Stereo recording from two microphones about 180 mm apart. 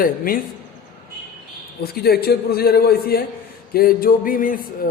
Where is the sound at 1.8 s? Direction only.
60° left (ahead or behind).